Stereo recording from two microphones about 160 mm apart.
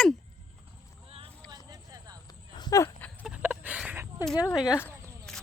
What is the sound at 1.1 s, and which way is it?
Vehicle, 35° right (ahead or behind).